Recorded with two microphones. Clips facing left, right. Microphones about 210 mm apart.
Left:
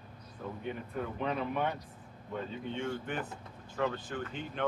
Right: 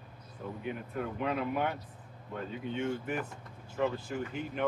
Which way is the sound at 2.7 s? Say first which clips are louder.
Right 3 dB; 10° right (ahead or behind).